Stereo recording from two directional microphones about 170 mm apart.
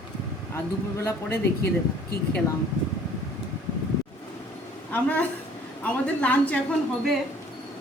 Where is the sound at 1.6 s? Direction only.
70° left (ahead or behind).